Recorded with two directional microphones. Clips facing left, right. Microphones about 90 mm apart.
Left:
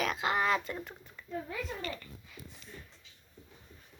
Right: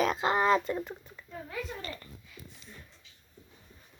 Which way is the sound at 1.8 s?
35° right (ahead or behind).